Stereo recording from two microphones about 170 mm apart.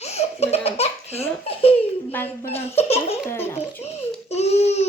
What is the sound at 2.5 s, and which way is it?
Speech, 35° left (ahead or behind).